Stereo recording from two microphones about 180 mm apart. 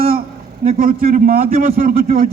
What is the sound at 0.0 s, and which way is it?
A man's voice, 55° right (ahead or behind).